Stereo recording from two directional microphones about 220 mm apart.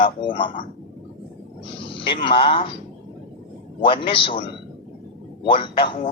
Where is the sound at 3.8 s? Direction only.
25° left (ahead or behind).